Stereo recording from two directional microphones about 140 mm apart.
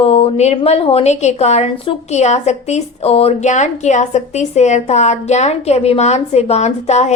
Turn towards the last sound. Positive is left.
turn(degrees=55)  # may be behind; listen again after turning